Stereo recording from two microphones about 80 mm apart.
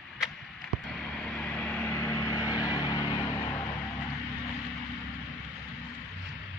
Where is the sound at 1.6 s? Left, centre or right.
Left.